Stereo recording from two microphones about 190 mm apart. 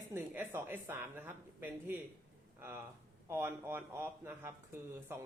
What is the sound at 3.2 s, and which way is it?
Speech, 10° right (ahead or behind).